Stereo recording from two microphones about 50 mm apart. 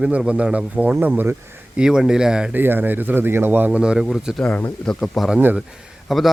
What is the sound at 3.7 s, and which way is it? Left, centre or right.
Speech, centre.